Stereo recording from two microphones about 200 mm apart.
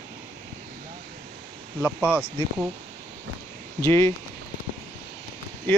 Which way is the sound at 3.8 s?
15° left (ahead or behind).